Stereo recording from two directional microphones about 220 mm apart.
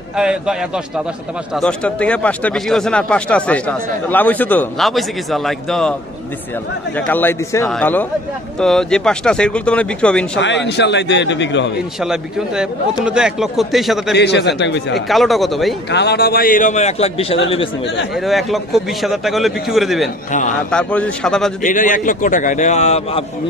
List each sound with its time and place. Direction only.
0.1 s speech: 5° right (ahead or behind)
7.1 s a man's voice: 10° left (ahead or behind)
10.4 s a man's voice: 55° left (ahead or behind)
12.0 s speech: centre (ahead or behind)
14.1 s a man's voice: 50° left (ahead or behind)
15.0 s speech: centre (ahead or behind)
15.9 s a man's voice: 50° left (ahead or behind); by 17.4 s 25° left (ahead or behind)
18.1 s speech: centre (ahead or behind)
20.2 s a man's voice: 35° left (ahead or behind)
20.7 s speech: 5° left (ahead or behind)
21.6 s a man's voice: 35° left (ahead or behind)